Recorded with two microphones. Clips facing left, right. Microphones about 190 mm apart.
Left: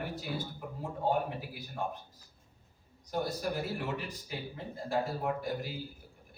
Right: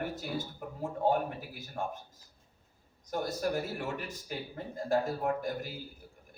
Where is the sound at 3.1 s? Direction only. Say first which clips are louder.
Right 1 dB; 45° right (ahead or behind).